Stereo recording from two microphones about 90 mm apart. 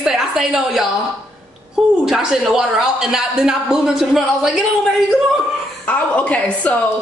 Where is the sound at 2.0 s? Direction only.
5° right (ahead or behind).